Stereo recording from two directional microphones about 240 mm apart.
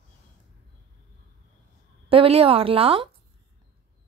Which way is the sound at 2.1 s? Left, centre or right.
Right.